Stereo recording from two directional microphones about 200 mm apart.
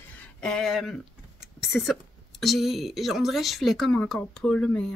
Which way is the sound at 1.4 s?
Centre (ahead or behind).